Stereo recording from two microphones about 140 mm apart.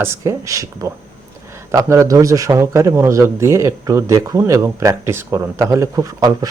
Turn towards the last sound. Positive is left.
turn(degrees=-25)  # may be behind; listen again after turning